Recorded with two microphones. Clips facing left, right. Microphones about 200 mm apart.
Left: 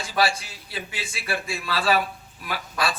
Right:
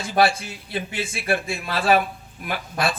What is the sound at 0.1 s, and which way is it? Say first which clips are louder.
A man's voice: right 5 dB; 55° right (ahead or behind).